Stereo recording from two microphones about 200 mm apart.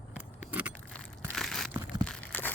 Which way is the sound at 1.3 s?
Centre (ahead or behind).